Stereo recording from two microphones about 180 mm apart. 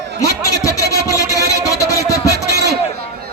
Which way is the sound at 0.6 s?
20° left (ahead or behind).